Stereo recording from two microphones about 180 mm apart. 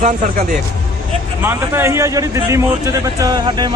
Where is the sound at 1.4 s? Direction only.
15° right (ahead or behind).